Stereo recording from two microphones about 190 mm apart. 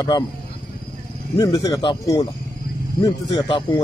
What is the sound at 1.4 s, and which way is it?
Speech, 20° left (ahead or behind).